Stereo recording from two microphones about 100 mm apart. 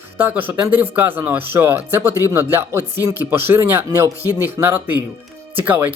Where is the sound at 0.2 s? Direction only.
20° right (ahead or behind).